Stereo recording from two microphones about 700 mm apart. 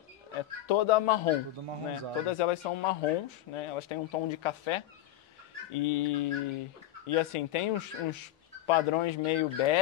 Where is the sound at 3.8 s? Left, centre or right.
Left.